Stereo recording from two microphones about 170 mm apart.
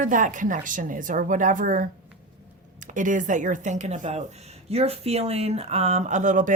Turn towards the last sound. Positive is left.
turn(degrees=-50)  # may be behind; listen again after turning